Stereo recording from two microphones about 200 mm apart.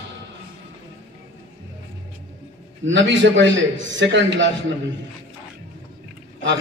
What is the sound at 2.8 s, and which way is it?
A man's voice, 65° right (ahead or behind).